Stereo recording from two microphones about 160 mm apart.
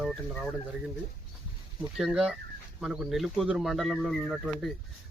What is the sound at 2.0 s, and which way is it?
Speech, 5° right (ahead or behind).